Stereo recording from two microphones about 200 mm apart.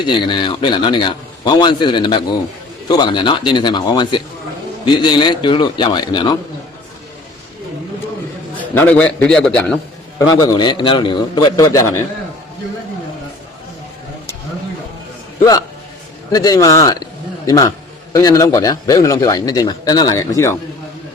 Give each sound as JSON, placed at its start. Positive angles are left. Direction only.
{"t": 0.0, "sound": "a man's voice", "side_deg": 25}
{"t": 8.8, "sound": "a man's voice", "side_deg": 5}
{"t": 10.3, "sound": "a man's voice", "side_deg": 25}
{"t": 16.3, "sound": "a man's voice", "side_deg": 20}